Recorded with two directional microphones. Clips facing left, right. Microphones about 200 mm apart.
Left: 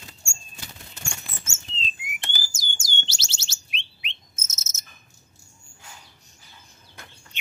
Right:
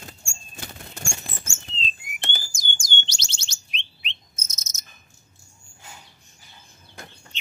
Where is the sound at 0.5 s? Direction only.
50° right (ahead or behind).